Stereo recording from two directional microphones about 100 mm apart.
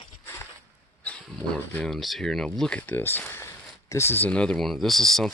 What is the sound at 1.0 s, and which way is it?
Speech, 15° left (ahead or behind).